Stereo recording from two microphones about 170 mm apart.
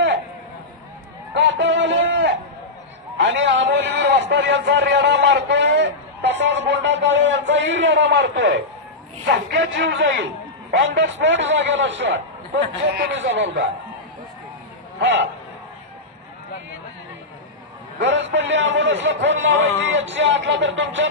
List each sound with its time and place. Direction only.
1.3 s a sound: 90° right
3.2 s a man's voice: 90° right
15.0 s a man's voice: 90° right
18.0 s a man's voice: 90° right